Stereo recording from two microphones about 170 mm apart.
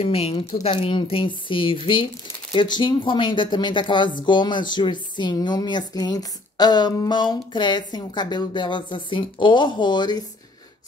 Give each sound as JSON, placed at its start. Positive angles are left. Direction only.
{"t": 0.0, "sound": "speech", "side_deg": 35}